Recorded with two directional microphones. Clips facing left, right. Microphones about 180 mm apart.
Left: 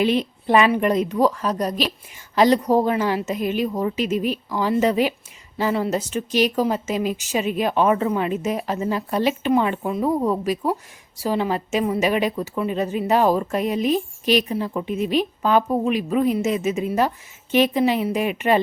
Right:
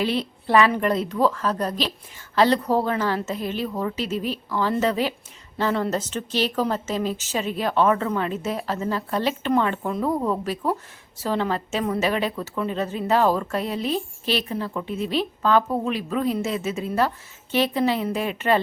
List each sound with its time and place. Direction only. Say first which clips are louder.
0.0 s a woman's voice: left 4 dB; 15° left (ahead or behind)